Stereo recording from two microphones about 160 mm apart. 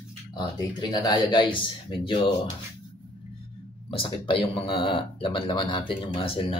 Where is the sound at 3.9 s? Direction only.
35° left (ahead or behind).